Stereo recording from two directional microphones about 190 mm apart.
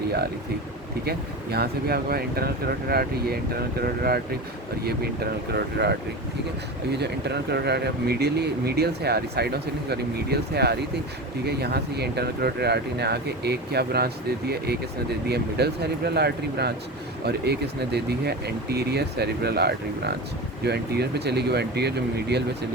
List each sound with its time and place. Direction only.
1.0 s speech: 55° right (ahead or behind)
5.5 s speech: 60° right (ahead or behind)